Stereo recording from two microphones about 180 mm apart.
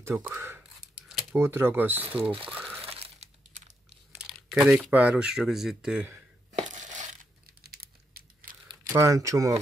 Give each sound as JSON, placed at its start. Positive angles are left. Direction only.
{"t": 0.3, "sound": "a sound", "side_deg": -10}
{"t": 1.4, "sound": "speech", "side_deg": -15}
{"t": 2.8, "sound": "a sound", "side_deg": -35}
{"t": 4.3, "sound": "speech", "side_deg": -5}
{"t": 6.5, "sound": "coin", "side_deg": -45}
{"t": 8.8, "sound": "speech", "side_deg": -15}